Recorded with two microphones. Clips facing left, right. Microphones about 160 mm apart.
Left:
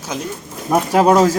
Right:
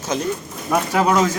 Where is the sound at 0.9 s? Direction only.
35° left (ahead or behind).